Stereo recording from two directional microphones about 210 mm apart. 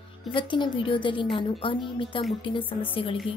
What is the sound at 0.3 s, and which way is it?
A woman's voice, 25° left (ahead or behind).